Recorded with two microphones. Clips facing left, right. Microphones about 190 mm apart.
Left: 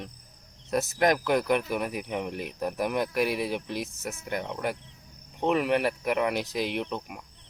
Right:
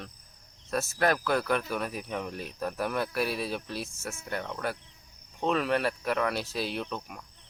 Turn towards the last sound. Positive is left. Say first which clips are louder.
# left 3 dB
turn(degrees=15)  # may be behind; listen again after turning